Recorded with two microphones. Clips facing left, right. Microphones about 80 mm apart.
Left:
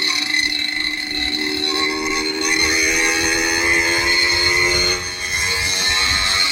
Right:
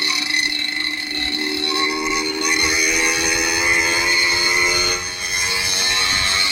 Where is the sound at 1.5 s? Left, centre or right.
Centre.